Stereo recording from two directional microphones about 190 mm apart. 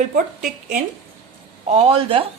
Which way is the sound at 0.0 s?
45° right (ahead or behind).